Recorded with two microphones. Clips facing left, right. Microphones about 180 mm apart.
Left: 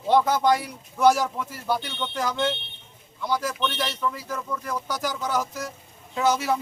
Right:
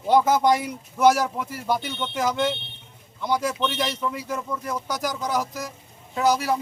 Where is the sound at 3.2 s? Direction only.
20° right (ahead or behind).